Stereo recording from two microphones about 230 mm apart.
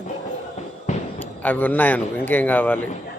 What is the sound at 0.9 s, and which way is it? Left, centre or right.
Basketball bounce, left.